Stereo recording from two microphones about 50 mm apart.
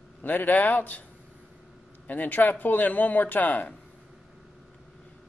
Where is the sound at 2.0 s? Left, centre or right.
Left.